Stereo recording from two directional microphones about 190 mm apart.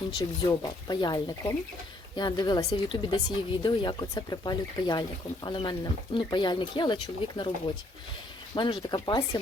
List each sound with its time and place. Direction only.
0.2 s speech: 20° left (ahead or behind)
8.5 s speech: 25° left (ahead or behind)